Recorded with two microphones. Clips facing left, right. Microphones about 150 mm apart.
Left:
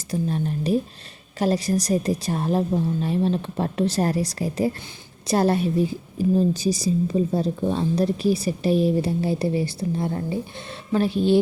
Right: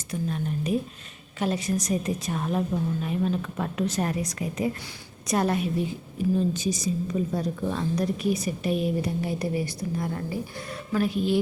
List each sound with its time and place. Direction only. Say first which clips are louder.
0.1 s a woman's voice: left 4 dB; 35° left (ahead or behind)